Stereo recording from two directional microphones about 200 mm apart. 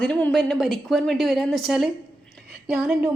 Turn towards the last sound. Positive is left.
turn(degrees=-10)  # may be behind; listen again after turning